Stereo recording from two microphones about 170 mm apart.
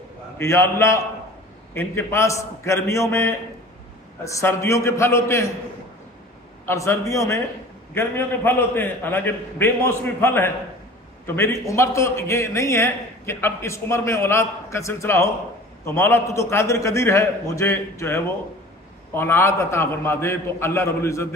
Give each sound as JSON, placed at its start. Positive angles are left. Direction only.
{"t": 0.4, "sound": "a man's voice", "side_deg": 15}
{"t": 6.6, "sound": "a man's voice", "side_deg": 15}